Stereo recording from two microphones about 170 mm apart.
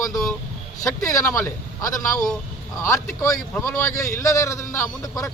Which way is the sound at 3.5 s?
15° left (ahead or behind).